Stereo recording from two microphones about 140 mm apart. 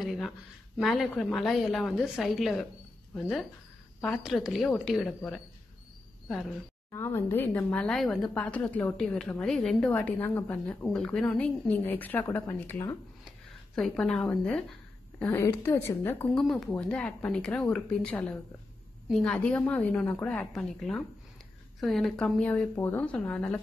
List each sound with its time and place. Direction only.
0.0 s a sound: centre (ahead or behind)
0.7 s a woman's voice: centre (ahead or behind)
6.9 s a woman's voice: 20° left (ahead or behind)
13.7 s a woman's voice: 5° left (ahead or behind)
16.3 s a woman's voice: centre (ahead or behind)